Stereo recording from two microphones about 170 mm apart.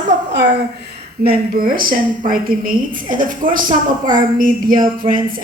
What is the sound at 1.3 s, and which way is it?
A woman's voice, 55° right (ahead or behind).